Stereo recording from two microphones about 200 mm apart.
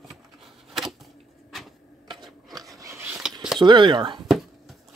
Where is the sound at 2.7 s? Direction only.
15° right (ahead or behind).